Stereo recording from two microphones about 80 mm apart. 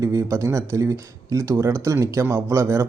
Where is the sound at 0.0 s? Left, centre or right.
Right.